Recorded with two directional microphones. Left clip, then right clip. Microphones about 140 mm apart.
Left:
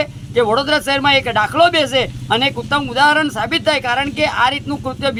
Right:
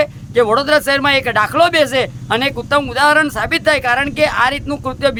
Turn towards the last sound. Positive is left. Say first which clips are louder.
# right 3 dB
turn(degrees=-40)  # may be behind; listen again after turning